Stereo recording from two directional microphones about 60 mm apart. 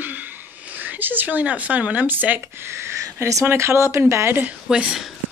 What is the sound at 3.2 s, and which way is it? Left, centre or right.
Speech, right.